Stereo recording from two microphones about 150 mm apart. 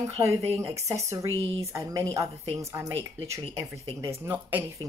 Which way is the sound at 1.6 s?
20° right (ahead or behind).